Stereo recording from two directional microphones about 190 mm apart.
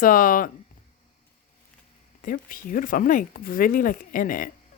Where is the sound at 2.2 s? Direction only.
45° left (ahead or behind).